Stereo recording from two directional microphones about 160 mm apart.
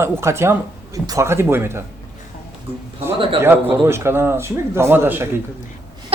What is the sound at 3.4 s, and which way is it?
A man's voice, 15° right (ahead or behind).